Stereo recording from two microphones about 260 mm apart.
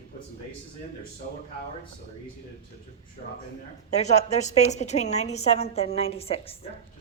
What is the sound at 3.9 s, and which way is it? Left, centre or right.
A woman's voice, left.